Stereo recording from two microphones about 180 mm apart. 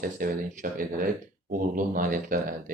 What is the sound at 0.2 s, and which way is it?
Speech, 50° right (ahead or behind).